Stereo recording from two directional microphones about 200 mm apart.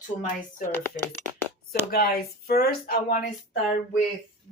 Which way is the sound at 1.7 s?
50° left (ahead or behind).